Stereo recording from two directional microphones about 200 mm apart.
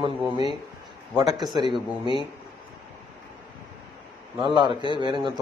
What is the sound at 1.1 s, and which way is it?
Speech, 20° right (ahead or behind).